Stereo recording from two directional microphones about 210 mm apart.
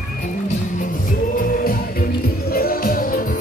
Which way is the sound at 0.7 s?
40° left (ahead or behind).